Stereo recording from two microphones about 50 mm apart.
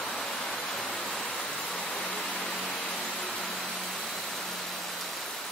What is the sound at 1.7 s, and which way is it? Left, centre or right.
Vehicle, centre.